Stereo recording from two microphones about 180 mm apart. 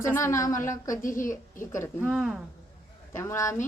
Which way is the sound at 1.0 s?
45° left (ahead or behind).